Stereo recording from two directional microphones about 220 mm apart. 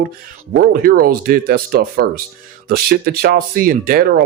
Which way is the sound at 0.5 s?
40° right (ahead or behind).